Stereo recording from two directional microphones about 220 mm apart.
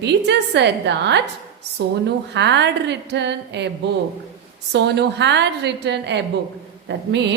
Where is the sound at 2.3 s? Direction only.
50° right (ahead or behind).